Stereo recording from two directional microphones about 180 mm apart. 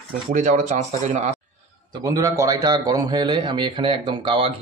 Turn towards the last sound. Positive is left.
turn(degrees=-30)  # may be behind; listen again after turning